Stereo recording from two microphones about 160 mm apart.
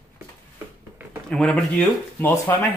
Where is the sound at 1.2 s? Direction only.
5° left (ahead or behind).